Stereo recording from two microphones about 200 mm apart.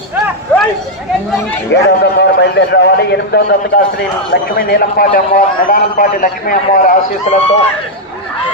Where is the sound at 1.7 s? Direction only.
60° left (ahead or behind).